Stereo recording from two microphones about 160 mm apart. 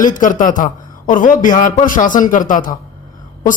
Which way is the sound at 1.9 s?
55° left (ahead or behind).